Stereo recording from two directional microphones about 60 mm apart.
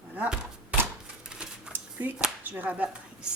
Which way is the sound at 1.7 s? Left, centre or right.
Right.